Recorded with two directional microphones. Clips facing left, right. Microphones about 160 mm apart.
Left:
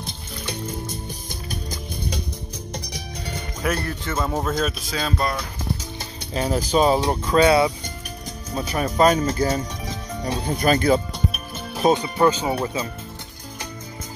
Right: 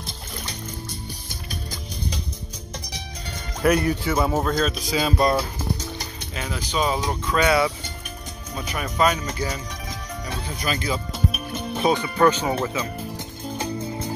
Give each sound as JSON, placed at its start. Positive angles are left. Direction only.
{"t": 3.6, "sound": "speech", "side_deg": -5}
{"t": 5.9, "sound": "speech", "side_deg": 35}
{"t": 10.4, "sound": "speech", "side_deg": 50}
{"t": 11.1, "sound": "music", "side_deg": 0}
{"t": 11.9, "sound": "speech", "side_deg": 20}